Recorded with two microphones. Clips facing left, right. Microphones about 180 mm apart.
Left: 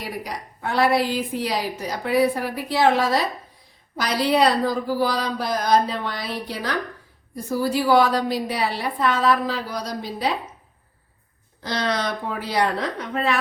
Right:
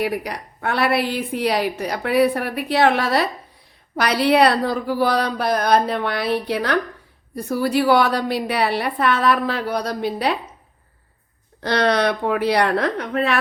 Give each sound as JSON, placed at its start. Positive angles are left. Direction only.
{"t": 0.0, "sound": "a woman's voice", "side_deg": -65}
{"t": 11.6, "sound": "a woman's voice", "side_deg": -65}